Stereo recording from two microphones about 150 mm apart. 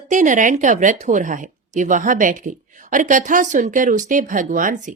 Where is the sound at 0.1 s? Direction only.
60° right (ahead or behind).